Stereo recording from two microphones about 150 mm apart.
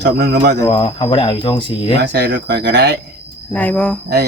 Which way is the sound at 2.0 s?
90° right.